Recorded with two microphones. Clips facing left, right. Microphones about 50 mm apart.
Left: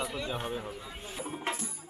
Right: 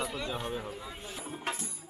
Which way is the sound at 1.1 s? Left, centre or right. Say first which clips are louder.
Left 3 dB; left.